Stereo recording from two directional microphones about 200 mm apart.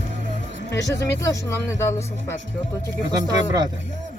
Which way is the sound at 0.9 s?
15° left (ahead or behind).